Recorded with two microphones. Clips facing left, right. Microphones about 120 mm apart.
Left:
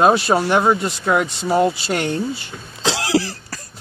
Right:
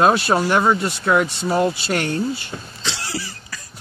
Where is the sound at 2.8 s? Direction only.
90° left.